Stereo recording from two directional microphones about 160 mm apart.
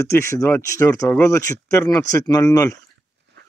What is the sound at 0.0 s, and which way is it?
Speech, 15° left (ahead or behind).